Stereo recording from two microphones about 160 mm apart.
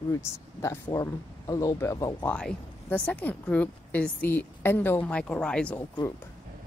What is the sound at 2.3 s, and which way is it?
Speech, 5° left (ahead or behind).